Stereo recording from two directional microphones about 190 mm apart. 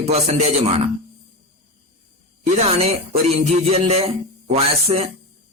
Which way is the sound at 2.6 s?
35° right (ahead or behind).